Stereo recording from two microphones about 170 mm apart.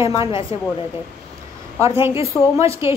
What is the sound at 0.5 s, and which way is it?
Speech, 35° left (ahead or behind).